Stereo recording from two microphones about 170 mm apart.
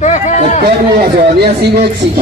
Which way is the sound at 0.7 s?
65° right (ahead or behind).